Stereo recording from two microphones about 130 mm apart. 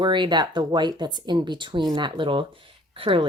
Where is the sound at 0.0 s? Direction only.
35° right (ahead or behind).